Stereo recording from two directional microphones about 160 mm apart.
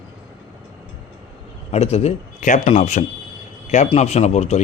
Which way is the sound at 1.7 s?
40° left (ahead or behind).